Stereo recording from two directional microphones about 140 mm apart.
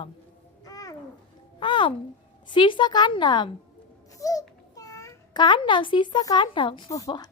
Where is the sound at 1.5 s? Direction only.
35° left (ahead or behind).